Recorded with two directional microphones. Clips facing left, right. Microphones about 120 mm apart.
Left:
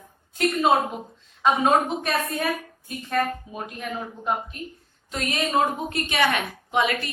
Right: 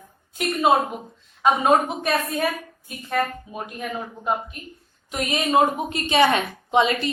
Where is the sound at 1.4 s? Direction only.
5° right (ahead or behind).